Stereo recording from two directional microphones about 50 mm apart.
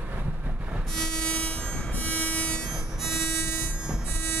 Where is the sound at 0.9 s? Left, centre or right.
Centre.